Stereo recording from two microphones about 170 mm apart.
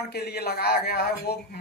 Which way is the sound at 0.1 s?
70° left (ahead or behind).